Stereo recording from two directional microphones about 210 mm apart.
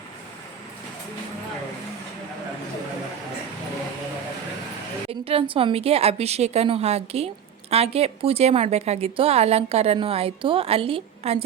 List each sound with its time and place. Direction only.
5.2 s a woman's voice: 25° right (ahead or behind)